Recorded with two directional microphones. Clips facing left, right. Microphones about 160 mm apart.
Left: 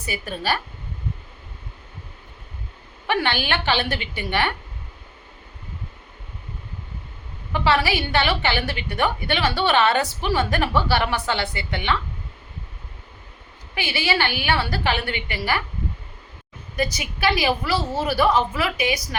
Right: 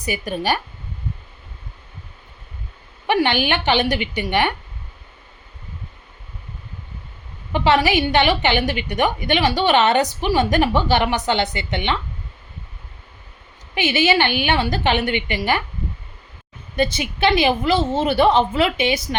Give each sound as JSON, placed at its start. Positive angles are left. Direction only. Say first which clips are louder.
{"t": 0.0, "sound": "a woman's voice", "louder": "right 5 dB", "side_deg": -15}
{"t": 3.1, "sound": "a woman's voice", "louder": "right 5 dB", "side_deg": -15}
{"t": 7.5, "sound": "a woman's voice", "louder": "right 4 dB", "side_deg": -20}
{"t": 13.7, "sound": "a woman's voice", "louder": "right 6 dB", "side_deg": -20}
{"t": 16.7, "sound": "a woman's voice", "louder": "right 5 dB", "side_deg": -25}